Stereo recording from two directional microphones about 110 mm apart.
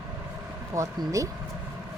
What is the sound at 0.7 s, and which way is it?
Speech, 30° right (ahead or behind).